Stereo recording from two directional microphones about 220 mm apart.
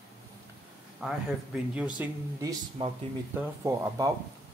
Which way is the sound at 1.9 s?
15° right (ahead or behind).